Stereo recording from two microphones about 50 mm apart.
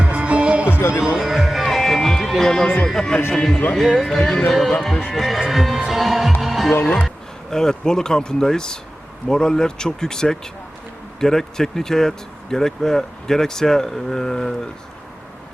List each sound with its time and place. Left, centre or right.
0.0 s music: right
0.7 s a sound: left
0.9 s music: centre
2.8 s speech: centre
3.8 s speech: centre
5.1 s speech: centre
5.9 s music: centre
6.4 s heart sounds: centre
7.5 s speech: centre